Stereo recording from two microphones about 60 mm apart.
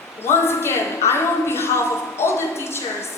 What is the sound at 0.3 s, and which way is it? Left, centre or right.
A woman's voice, left.